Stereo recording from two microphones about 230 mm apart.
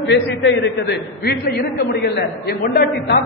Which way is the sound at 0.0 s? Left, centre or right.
Left.